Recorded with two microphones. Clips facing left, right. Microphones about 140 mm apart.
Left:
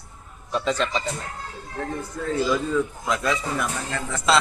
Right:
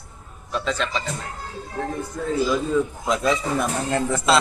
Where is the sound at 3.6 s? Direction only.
35° right (ahead or behind).